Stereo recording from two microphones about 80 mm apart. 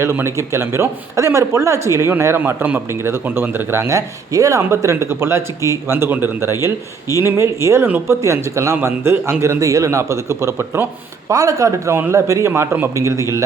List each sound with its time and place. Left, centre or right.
0.0 s a man's voice: right
11.9 s a man's voice: right